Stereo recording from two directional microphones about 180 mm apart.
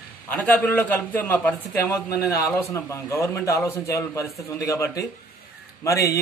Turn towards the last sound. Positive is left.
turn(degrees=15)  # may be behind; listen again after turning